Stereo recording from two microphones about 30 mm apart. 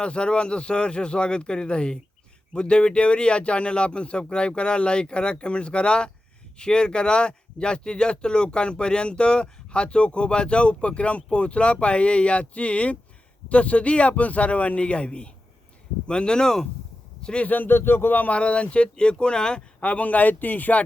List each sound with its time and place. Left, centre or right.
0.0 s a man's voice: left; by 16.6 s centre
17.4 s speech: left
18.3 s speech: left
18.9 s speech: left
19.8 s speech: left